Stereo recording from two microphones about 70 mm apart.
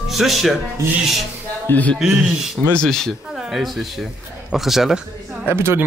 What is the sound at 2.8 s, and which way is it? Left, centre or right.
Speech, centre.